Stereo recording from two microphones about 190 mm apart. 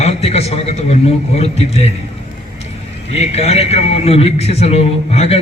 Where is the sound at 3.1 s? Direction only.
35° left (ahead or behind).